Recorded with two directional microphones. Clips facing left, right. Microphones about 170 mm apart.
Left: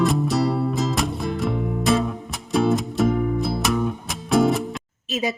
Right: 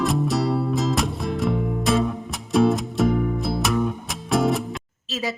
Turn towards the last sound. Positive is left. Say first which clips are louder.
# left 3 dB
turn(degrees=20)  # may be behind; listen again after turning